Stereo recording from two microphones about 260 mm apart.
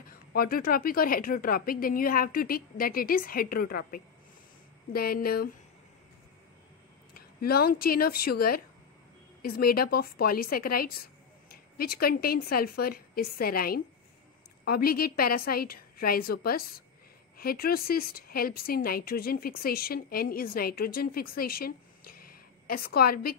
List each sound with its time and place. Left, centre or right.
0.0 s speech: left
7.2 s speech: left